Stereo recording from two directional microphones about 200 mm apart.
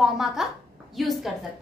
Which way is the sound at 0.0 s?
Centre (ahead or behind).